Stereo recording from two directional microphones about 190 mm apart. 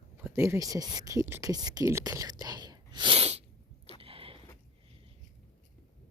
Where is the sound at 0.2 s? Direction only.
15° right (ahead or behind); by 3.4 s 35° right (ahead or behind).